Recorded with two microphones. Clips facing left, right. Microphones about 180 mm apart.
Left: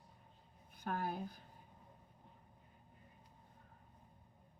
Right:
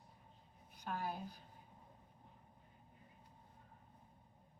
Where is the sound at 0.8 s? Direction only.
50° left (ahead or behind).